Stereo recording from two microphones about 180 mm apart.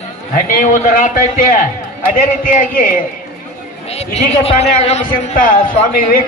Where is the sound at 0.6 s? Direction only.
50° left (ahead or behind).